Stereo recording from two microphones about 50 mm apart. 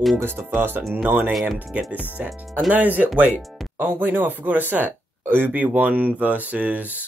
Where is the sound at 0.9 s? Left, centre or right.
Right.